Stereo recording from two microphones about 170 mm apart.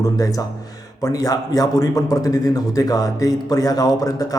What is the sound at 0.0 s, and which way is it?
A man's voice, 20° left (ahead or behind).